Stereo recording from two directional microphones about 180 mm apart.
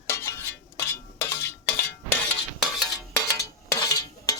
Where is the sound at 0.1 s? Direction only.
15° left (ahead or behind); by 2.9 s centre (ahead or behind).